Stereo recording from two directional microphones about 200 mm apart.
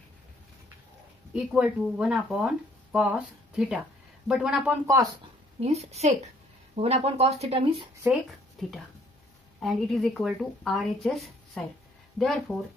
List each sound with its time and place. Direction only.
1.3 s speech: 5° right (ahead or behind)
5.6 s speech: 30° right (ahead or behind)
8.1 s speech: centre (ahead or behind)